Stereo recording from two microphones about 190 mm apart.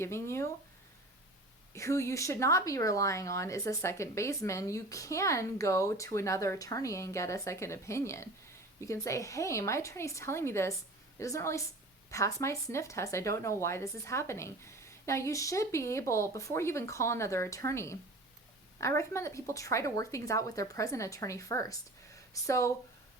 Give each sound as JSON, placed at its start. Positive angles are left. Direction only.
{"t": 0.0, "sound": "speech", "side_deg": 15}
{"t": 1.7, "sound": "speech", "side_deg": 15}